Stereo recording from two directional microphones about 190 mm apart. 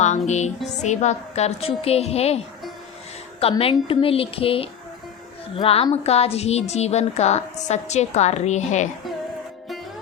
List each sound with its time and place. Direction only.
0.0 s a woman's voice: 35° left (ahead or behind)
3.4 s a woman's voice: 30° left (ahead or behind)